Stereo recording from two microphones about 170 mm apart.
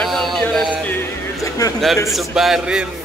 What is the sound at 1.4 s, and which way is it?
Speech, 20° left (ahead or behind).